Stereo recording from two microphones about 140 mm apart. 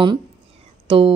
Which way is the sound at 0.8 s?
40° right (ahead or behind).